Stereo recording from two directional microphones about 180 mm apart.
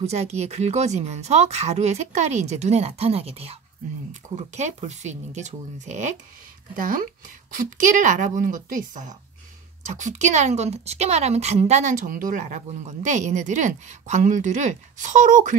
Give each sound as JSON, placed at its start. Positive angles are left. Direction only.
{"t": 0.0, "sound": "a woman's voice", "side_deg": -35}